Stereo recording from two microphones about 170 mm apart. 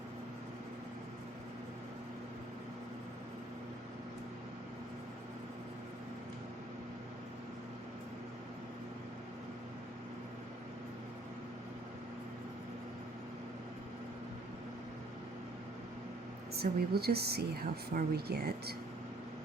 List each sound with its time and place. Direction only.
16.6 s speech: 65° right (ahead or behind)